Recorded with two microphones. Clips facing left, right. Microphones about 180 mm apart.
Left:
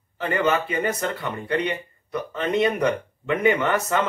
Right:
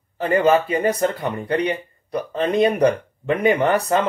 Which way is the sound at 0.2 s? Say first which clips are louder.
Right 6 dB; 35° right (ahead or behind).